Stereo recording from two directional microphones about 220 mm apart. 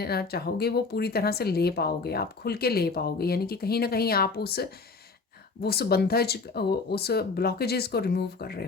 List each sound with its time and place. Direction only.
0.0 s speech: 45° left (ahead or behind)